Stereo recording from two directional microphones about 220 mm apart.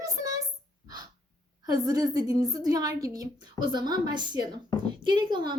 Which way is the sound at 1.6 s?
15° right (ahead or behind).